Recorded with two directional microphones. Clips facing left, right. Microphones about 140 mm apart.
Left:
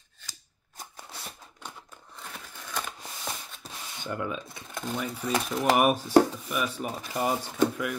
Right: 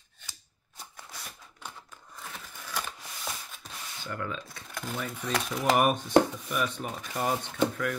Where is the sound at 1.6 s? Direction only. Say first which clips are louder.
Even; 5° right (ahead or behind).